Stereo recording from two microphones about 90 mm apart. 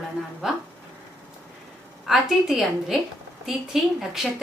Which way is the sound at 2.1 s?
Centre (ahead or behind).